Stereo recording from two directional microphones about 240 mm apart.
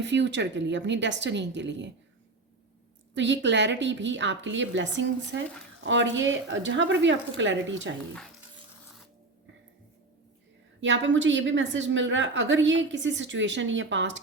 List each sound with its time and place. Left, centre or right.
0.0 s a woman's voice: right
3.2 s a woman's voice: right
10.8 s a woman's voice: right